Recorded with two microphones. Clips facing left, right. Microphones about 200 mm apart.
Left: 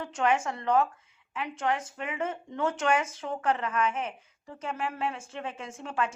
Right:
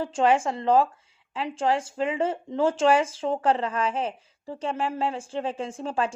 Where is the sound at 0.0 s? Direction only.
30° right (ahead or behind).